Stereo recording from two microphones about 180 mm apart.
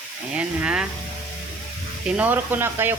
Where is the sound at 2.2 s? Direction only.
10° right (ahead or behind).